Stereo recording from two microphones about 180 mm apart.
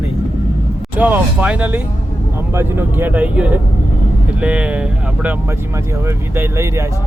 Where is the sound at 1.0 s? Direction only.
10° right (ahead or behind).